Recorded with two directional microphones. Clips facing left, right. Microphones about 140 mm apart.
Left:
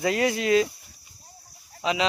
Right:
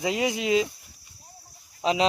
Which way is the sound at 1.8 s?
35° right (ahead or behind).